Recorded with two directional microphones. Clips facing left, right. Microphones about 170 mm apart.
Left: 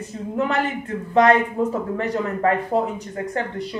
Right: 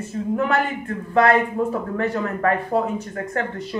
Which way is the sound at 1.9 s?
20° left (ahead or behind).